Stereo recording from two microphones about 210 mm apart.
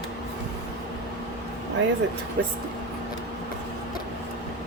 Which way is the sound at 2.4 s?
55° right (ahead or behind).